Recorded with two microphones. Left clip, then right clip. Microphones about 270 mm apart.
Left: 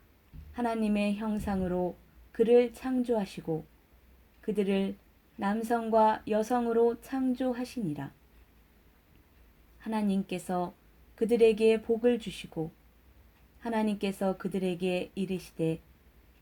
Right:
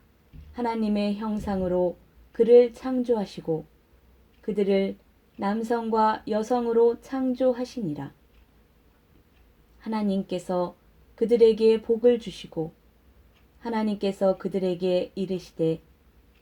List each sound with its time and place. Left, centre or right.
0.5 s speech: left
9.8 s speech: left
13.6 s speech: left